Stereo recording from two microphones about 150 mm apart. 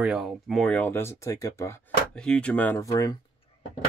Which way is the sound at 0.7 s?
15° left (ahead or behind).